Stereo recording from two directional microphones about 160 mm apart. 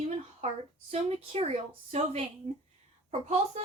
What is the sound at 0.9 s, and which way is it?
A woman's voice, 40° right (ahead or behind).